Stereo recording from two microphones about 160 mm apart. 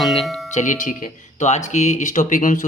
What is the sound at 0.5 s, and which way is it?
Speech, 50° left (ahead or behind).